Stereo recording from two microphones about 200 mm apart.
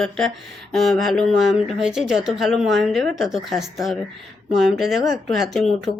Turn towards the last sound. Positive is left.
turn(degrees=0)  # may be behind; listen again after turning